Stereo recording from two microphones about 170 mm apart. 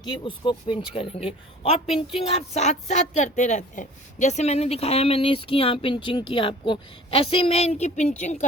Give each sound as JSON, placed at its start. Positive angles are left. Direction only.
{"t": 0.0, "sound": "speech", "side_deg": 30}